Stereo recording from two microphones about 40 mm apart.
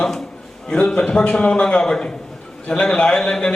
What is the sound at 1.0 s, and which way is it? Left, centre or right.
A man's voice, left.